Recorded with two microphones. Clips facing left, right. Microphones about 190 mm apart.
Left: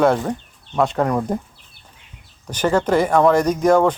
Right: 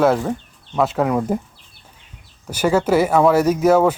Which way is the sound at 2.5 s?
10° right (ahead or behind).